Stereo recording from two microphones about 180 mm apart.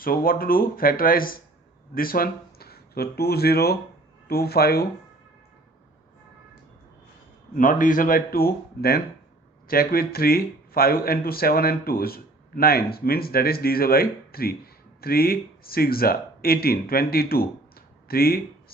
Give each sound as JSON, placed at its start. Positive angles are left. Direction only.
{"t": 0.0, "sound": "a man's voice", "side_deg": 55}
{"t": 7.5, "sound": "a man's voice", "side_deg": 50}